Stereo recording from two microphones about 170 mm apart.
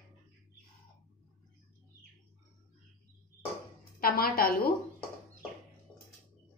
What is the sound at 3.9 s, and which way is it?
Speech, 65° left (ahead or behind).